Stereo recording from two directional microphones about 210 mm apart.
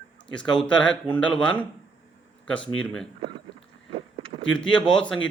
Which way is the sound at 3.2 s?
25° right (ahead or behind).